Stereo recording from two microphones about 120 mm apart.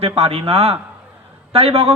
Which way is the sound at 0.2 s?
55° right (ahead or behind).